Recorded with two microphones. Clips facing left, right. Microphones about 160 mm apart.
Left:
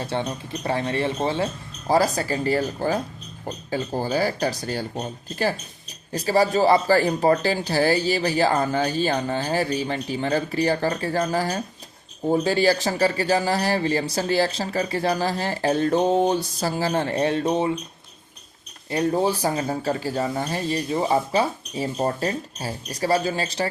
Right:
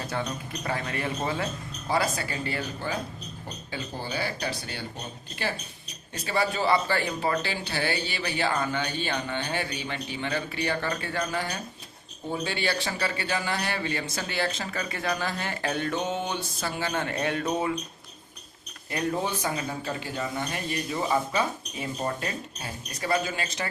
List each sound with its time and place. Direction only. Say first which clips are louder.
0.0 s speech: left 5 dB; 30° left (ahead or behind)
18.9 s speech: left 7 dB; 30° left (ahead or behind)